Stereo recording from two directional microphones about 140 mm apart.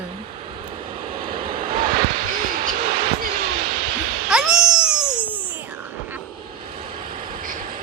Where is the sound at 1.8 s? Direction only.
80° right.